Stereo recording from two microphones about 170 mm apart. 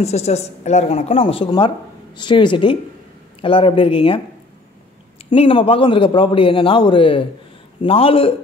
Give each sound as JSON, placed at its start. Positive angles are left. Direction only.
{"t": 0.0, "sound": "a man's voice", "side_deg": 40}
{"t": 5.3, "sound": "a man's voice", "side_deg": 30}